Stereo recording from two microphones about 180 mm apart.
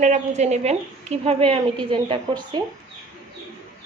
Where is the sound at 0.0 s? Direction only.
40° right (ahead or behind).